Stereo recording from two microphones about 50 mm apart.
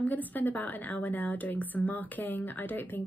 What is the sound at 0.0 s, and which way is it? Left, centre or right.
Speech, left.